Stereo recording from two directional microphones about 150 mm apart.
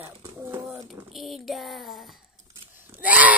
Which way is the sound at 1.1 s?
Centre (ahead or behind).